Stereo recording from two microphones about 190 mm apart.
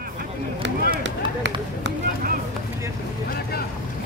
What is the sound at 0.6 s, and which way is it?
Run, 60° right (ahead or behind).